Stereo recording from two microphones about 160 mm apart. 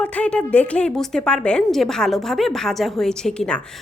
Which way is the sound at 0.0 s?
10° left (ahead or behind).